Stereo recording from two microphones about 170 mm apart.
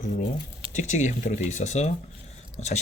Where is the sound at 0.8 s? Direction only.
45° left (ahead or behind).